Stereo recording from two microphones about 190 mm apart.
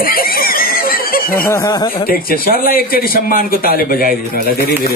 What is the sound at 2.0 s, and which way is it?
A man's voice, 50° left (ahead or behind).